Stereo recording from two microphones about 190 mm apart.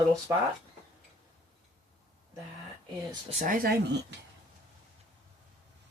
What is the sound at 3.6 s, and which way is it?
Speech, 65° right (ahead or behind).